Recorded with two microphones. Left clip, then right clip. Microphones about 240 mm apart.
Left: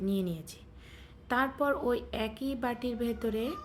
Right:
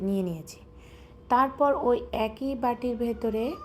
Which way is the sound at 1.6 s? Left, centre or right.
Centre.